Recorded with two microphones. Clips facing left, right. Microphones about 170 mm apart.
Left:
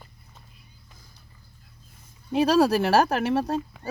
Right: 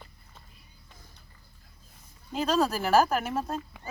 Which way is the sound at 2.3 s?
70° left (ahead or behind).